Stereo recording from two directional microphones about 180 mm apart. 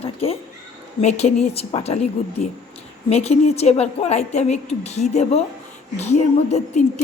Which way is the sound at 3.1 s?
35° left (ahead or behind).